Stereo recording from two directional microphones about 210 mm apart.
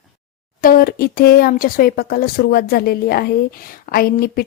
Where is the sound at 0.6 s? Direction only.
45° left (ahead or behind).